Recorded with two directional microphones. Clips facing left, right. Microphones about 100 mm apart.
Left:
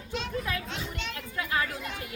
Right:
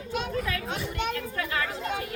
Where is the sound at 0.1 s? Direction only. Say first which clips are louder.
Right 3 dB; 50° right (ahead or behind).